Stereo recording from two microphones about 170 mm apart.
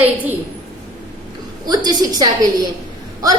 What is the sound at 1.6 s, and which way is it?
Speech, 25° right (ahead or behind).